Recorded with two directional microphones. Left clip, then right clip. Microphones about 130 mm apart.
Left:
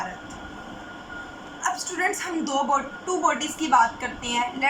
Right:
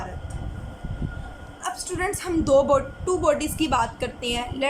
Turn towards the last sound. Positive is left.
turn(degrees=-20)  # may be behind; listen again after turning